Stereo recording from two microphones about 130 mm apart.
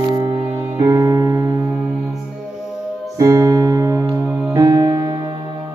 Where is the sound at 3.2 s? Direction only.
25° right (ahead or behind).